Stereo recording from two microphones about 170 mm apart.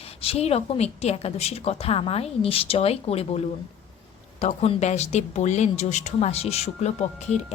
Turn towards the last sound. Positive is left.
turn(degrees=40)  # may be behind; listen again after turning